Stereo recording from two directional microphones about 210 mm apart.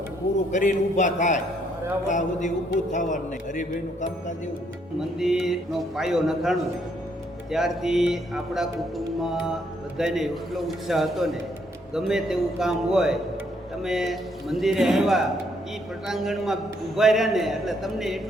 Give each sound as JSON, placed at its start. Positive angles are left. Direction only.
{"t": 0.5, "sound": "a man's voice", "side_deg": 35}
{"t": 4.9, "sound": "a man's voice", "side_deg": 0}